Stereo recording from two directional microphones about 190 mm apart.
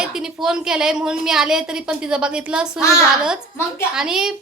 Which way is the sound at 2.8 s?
15° left (ahead or behind).